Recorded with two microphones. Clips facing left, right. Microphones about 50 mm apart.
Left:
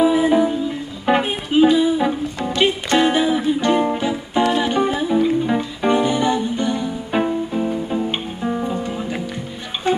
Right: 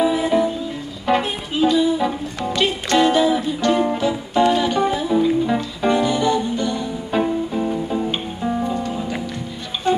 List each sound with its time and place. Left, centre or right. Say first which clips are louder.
0.0 s music: left 2 dB; centre
7.5 s music: even; centre